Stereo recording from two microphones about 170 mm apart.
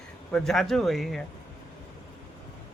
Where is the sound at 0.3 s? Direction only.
Centre (ahead or behind).